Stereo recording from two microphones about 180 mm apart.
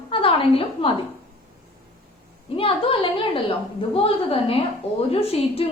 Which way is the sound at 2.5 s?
30° left (ahead or behind).